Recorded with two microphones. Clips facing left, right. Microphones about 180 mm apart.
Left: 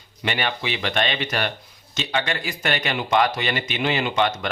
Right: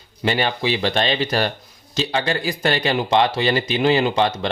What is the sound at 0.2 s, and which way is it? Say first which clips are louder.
Speech: right 5 dB; 30° right (ahead or behind).